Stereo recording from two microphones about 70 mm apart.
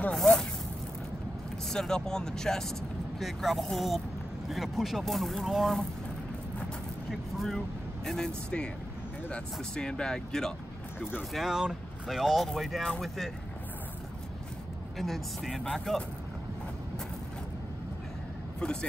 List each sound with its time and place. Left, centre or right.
0.1 s a sound: centre
1.7 s speech: centre
7.1 s speech: centre
9.3 s speech: centre
11.3 s speech: centre
15.0 s speech: centre
18.6 s speech: centre